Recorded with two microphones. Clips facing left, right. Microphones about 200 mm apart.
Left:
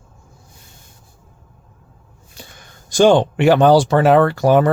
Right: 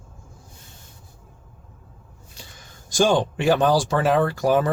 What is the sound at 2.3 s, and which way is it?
Speech, 60° left (ahead or behind).